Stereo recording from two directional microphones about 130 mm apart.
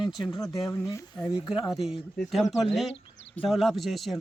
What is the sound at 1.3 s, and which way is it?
A man's voice, 5° right (ahead or behind).